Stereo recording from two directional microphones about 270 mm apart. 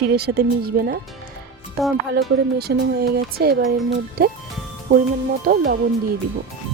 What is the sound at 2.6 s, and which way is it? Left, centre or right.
Speech, right.